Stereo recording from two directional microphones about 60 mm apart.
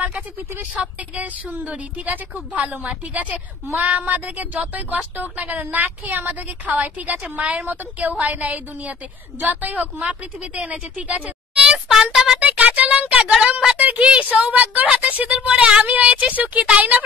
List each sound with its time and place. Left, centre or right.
0.0 s a sound: right
0.7 s a woman's voice: right
11.9 s speech: centre
12.4 s a woman's voice: right